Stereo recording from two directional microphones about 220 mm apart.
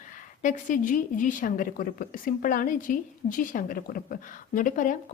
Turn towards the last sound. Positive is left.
turn(degrees=35)  # may be behind; listen again after turning